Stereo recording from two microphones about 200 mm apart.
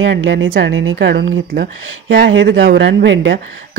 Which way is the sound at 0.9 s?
55° right (ahead or behind).